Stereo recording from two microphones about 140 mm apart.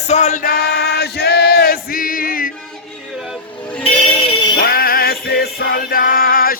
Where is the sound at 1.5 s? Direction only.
90° left.